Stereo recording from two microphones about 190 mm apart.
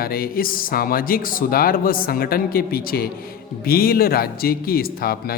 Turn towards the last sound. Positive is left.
turn(degrees=50)  # may be behind; listen again after turning